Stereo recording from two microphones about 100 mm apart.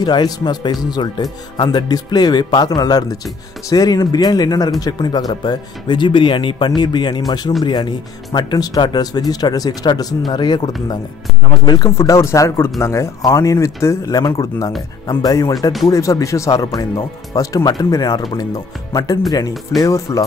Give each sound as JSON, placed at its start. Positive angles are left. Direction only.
{"t": 0.0, "sound": "speech", "side_deg": 45}